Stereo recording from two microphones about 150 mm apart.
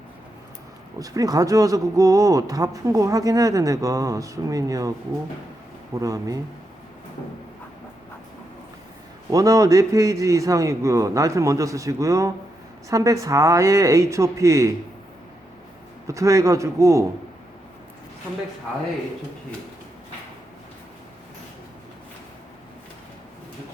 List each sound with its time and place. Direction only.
0.9 s speech: 25° right (ahead or behind)
9.3 s speech: 20° right (ahead or behind)
16.0 s speech: 20° right (ahead or behind)